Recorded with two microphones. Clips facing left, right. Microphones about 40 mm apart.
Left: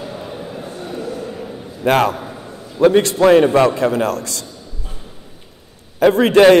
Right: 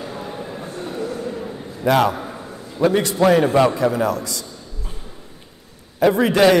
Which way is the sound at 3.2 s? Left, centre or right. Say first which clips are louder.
Left 2 dB; left.